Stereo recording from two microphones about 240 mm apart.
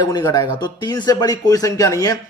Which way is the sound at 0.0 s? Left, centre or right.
Centre.